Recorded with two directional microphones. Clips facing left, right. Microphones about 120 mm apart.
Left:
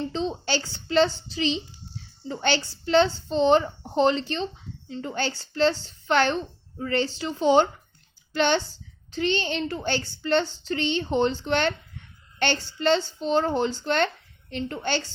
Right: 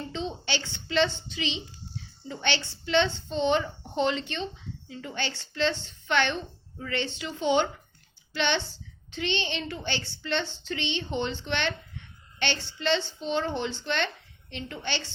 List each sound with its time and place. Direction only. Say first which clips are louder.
0.0 s a woman's voice: left 6 dB; 35° left (ahead or behind)